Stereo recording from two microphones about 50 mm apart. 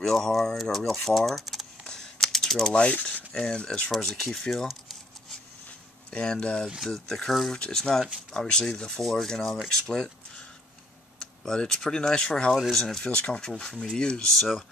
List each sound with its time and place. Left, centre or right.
0.0 s speech: centre
1.9 s computer keyboard: centre
2.8 s speech: left; by 4.7 s centre
6.0 s speech: centre
6.8 s speech: centre
7.5 s speech: centre
11.1 s speech: centre
13.1 s speech: left